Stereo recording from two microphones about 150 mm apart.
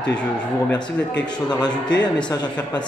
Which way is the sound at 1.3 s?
30° left (ahead or behind).